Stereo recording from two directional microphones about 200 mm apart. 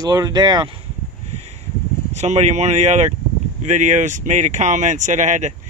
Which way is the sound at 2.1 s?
35° right (ahead or behind).